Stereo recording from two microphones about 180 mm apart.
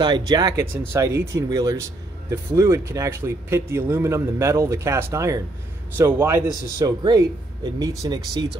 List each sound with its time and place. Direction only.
0.0 s a man's voice: 25° right (ahead or behind)